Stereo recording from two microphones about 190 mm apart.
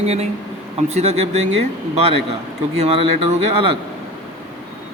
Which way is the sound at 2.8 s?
30° right (ahead or behind).